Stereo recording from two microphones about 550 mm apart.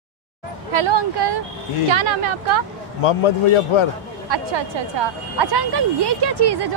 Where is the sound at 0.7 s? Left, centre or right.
Right.